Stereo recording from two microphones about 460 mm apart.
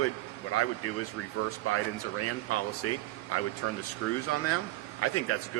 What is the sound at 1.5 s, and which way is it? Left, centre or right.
Speech, left.